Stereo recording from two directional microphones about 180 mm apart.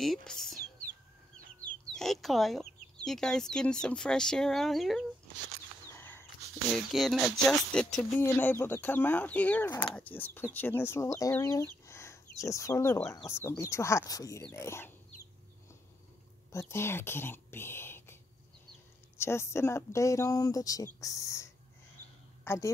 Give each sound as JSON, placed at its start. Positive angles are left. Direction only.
{"t": 0.0, "sound": "speech", "side_deg": 0}
{"t": 1.7, "sound": "speech", "side_deg": 5}
{"t": 5.9, "sound": "a sound", "side_deg": 10}
{"t": 6.7, "sound": "speech", "side_deg": 0}
{"t": 16.5, "sound": "speech", "side_deg": 15}
{"t": 19.1, "sound": "speech", "side_deg": 15}
{"t": 22.4, "sound": "a sound", "side_deg": 15}